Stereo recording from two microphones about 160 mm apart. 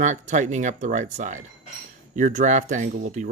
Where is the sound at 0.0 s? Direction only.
50° right (ahead or behind).